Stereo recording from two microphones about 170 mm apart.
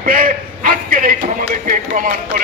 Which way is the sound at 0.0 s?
55° right (ahead or behind).